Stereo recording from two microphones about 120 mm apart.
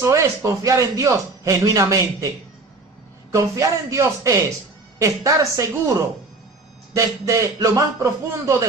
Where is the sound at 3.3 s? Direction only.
30° right (ahead or behind).